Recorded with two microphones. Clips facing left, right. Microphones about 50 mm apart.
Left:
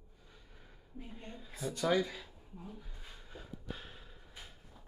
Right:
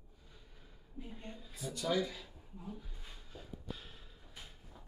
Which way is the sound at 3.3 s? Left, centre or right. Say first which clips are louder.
Left 1 dB; left.